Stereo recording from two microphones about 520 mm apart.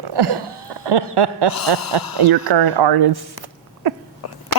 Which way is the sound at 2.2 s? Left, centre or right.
Right.